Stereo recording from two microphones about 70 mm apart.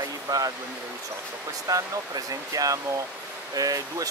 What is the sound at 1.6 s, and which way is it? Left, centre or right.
Speech, right.